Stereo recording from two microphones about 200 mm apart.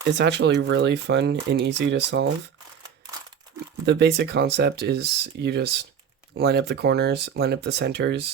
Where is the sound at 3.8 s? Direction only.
55° right (ahead or behind).